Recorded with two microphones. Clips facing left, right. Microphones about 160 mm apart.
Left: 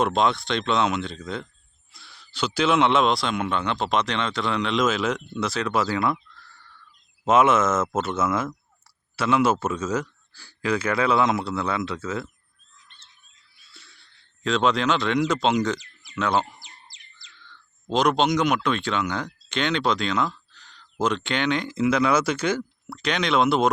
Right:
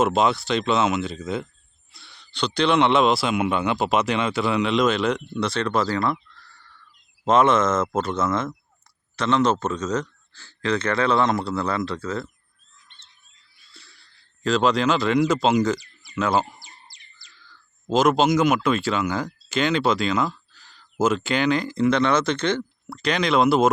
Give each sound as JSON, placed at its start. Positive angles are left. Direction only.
{"t": 0.0, "sound": "a man's voice", "side_deg": -5}
{"t": 13.7, "sound": "speech", "side_deg": 0}